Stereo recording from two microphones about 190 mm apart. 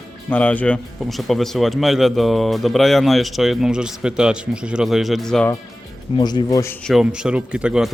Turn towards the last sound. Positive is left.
turn(degrees=-5)  # may be behind; listen again after turning